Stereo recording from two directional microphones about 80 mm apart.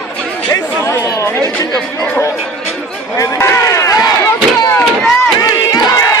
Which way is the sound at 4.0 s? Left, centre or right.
Left.